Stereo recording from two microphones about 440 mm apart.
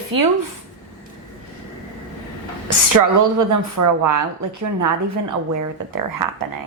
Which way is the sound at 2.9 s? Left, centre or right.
Right.